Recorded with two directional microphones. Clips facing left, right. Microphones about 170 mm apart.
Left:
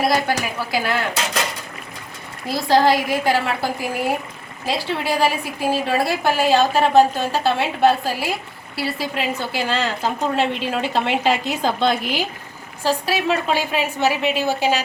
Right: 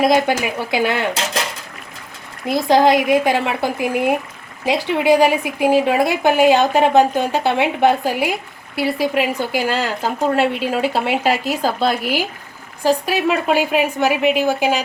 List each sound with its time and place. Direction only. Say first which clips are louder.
0.0 s speech: right 4 dB; 20° right (ahead or behind)
2.5 s a woman's voice: right 3 dB; 20° right (ahead or behind)